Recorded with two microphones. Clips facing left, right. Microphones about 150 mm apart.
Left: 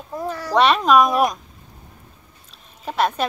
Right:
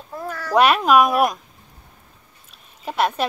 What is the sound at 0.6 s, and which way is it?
Speech, 5° right (ahead or behind).